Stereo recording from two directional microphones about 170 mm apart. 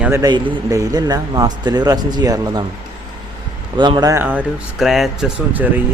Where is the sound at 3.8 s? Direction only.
25° right (ahead or behind).